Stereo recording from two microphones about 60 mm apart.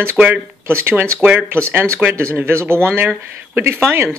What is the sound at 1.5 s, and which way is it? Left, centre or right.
Speech, right.